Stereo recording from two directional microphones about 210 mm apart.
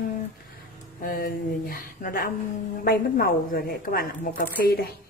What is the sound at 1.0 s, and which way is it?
Speech, 40° left (ahead or behind).